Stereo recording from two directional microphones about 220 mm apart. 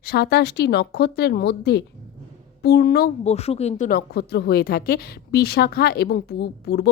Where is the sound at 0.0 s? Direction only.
45° left (ahead or behind).